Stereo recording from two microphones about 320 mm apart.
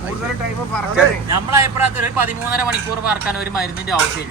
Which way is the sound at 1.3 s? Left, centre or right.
Centre.